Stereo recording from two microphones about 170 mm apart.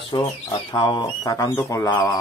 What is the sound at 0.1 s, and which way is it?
Speech, 20° left (ahead or behind).